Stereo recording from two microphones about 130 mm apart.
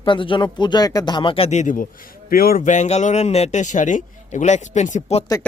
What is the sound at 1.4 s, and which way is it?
A man's voice, 70° left (ahead or behind).